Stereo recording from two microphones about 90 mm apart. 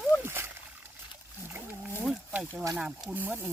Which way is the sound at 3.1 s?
20° right (ahead or behind).